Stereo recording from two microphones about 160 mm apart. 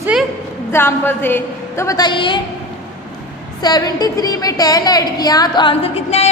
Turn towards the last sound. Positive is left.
turn(degrees=40)  # may be behind; listen again after turning